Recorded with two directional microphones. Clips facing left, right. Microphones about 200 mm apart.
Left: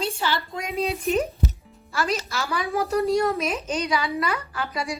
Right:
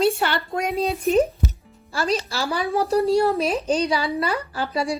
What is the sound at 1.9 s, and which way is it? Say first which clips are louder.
Speech: right 3 dB; 30° right (ahead or behind).